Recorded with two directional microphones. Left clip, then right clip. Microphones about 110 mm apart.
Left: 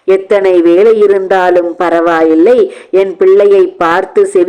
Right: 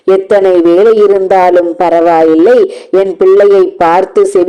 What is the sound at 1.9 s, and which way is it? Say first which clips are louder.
Speech: right 2 dB; 10° left (ahead or behind).